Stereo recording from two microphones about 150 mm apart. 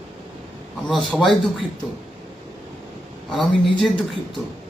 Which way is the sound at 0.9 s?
Centre (ahead or behind).